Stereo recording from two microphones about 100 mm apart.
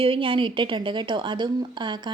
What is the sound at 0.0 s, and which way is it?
A woman's voice, 60° right (ahead or behind).